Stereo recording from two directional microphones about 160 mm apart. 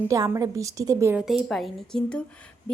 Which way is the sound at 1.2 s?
Centre (ahead or behind).